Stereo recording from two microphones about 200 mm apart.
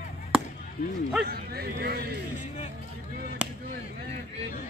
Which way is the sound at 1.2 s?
50° right (ahead or behind).